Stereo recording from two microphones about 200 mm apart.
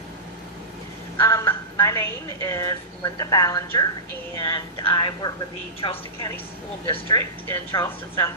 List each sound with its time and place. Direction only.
1.2 s a woman's voice: 15° left (ahead or behind)